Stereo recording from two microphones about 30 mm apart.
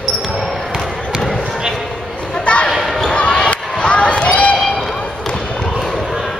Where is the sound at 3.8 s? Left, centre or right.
Left.